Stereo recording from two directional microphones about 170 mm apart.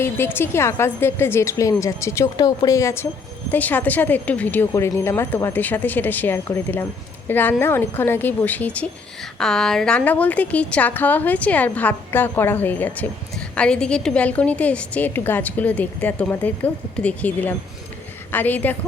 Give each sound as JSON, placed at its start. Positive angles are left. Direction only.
{"t": 0.3, "sound": "a woman's voice", "side_deg": 15}